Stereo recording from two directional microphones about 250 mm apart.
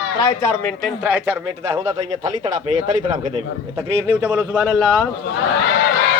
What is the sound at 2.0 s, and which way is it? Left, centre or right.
Speech, right.